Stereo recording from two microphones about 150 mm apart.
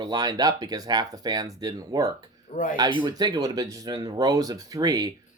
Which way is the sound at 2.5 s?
65° left (ahead or behind).